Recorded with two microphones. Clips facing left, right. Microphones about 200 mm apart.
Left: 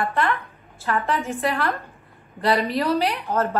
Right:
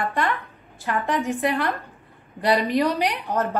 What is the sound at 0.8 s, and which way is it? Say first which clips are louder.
Speech: even; 15° right (ahead or behind).